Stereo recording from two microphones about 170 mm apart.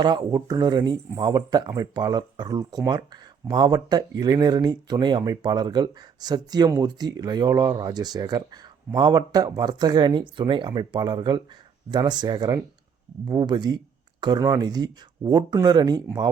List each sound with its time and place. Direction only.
0.0 s speech: 25° right (ahead or behind)